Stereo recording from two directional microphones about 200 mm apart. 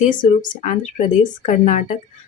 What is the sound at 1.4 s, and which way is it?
Speech, 35° left (ahead or behind).